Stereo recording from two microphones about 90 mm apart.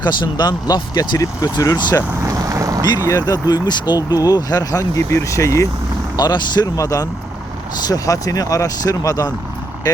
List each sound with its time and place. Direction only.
0.0 s speech: 55° left (ahead or behind)
1.4 s speech: 40° left (ahead or behind)
2.2 s vehicle: 40° right (ahead or behind)
3.1 s speech: 40° left (ahead or behind)
6.1 s speech: 50° left (ahead or behind)
6.7 s speech: 40° left (ahead or behind)